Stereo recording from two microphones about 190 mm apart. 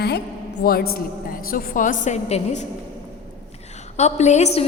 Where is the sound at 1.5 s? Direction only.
45° left (ahead or behind).